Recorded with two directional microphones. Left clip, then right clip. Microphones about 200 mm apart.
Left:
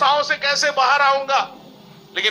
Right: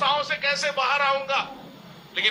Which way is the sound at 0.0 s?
45° left (ahead or behind).